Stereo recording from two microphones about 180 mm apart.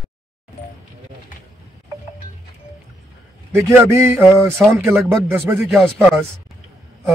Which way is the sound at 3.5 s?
15° right (ahead or behind).